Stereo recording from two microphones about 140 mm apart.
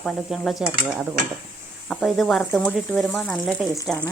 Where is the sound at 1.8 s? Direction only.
Centre (ahead or behind).